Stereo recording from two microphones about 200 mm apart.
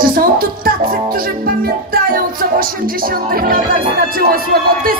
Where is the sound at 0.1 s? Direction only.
45° right (ahead or behind).